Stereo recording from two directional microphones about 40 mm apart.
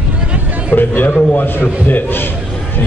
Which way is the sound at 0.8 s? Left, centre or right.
Left.